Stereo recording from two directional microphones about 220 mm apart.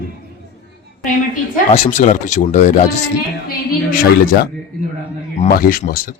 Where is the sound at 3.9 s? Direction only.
40° left (ahead or behind).